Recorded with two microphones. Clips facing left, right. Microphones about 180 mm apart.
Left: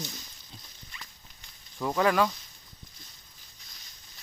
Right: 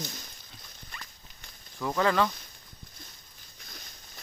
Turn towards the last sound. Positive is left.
turn(degrees=-55)  # may be behind; listen again after turning